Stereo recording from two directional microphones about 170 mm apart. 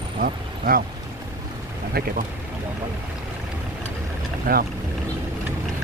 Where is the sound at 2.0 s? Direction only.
65° right (ahead or behind).